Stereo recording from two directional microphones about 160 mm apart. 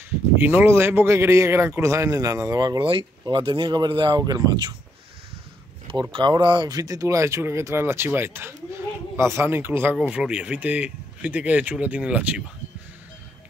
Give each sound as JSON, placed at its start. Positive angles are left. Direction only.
{"t": 0.4, "sound": "speech", "side_deg": -10}
{"t": 6.1, "sound": "speech", "side_deg": -30}